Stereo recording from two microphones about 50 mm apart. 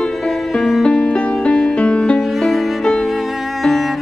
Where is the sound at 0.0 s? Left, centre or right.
Centre.